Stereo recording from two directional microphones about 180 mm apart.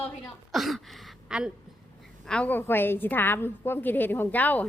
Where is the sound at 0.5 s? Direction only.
Centre (ahead or behind).